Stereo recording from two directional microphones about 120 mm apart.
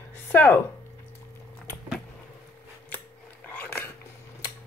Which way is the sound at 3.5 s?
15° left (ahead or behind).